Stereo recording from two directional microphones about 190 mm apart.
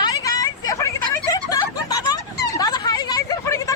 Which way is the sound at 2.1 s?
20° left (ahead or behind).